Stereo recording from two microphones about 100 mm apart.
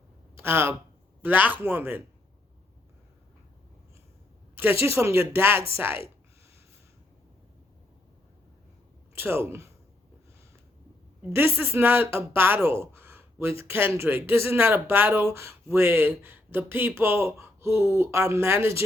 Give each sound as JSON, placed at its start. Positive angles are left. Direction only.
{"t": 0.3, "sound": "speech", "side_deg": -25}
{"t": 4.5, "sound": "speech", "side_deg": -20}
{"t": 9.1, "sound": "speech", "side_deg": -25}
{"t": 11.3, "sound": "speech", "side_deg": -25}